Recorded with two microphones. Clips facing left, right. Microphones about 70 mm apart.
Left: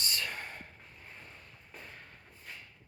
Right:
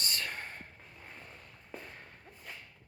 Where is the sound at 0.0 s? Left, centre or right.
Right.